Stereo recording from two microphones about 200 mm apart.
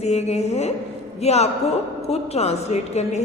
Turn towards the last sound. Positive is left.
turn(degrees=35)  # may be behind; listen again after turning